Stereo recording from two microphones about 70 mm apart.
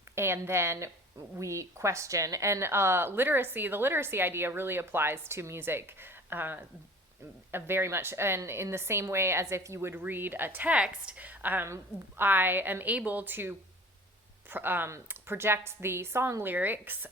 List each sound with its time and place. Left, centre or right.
0.2 s a woman's voice: right
9.9 s a woman's voice: right
11.6 s a woman's voice: right